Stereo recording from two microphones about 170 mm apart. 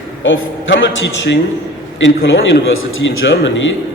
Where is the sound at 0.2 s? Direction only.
90° left.